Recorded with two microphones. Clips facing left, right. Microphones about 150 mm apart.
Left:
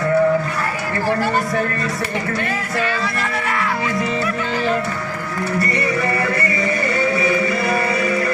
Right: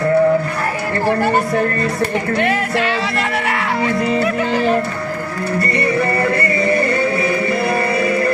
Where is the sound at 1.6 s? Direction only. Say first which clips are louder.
Right 4 dB; 55° right (ahead or behind).